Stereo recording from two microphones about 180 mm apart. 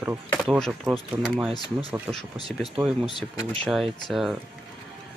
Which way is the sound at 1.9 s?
Centre (ahead or behind).